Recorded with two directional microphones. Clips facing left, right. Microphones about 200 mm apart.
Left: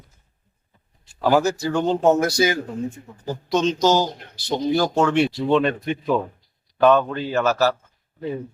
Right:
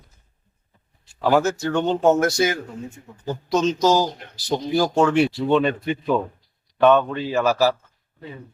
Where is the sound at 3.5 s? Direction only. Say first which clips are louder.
Even; 30° left (ahead or behind).